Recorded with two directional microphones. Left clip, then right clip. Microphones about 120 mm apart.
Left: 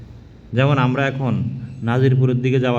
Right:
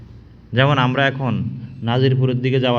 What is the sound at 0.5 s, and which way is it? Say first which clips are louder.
A man's voice: right 2 dB; 30° right (ahead or behind).